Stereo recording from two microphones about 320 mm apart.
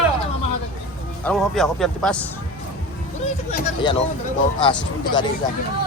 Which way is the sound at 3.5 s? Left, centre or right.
Centre.